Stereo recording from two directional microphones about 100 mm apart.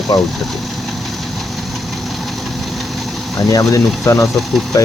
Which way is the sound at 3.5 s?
35° left (ahead or behind).